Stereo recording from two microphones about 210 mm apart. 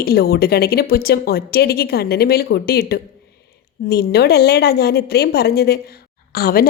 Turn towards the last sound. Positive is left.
turn(degrees=45)  # may be behind; listen again after turning